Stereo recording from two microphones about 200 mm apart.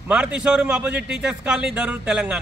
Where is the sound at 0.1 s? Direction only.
5° right (ahead or behind).